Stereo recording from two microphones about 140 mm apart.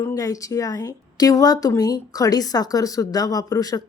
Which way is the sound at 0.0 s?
25° left (ahead or behind).